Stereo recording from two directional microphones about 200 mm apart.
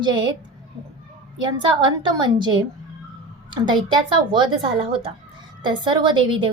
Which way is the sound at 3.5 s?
25° right (ahead or behind).